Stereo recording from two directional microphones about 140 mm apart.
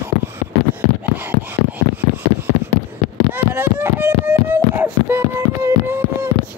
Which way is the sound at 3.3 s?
15° right (ahead or behind).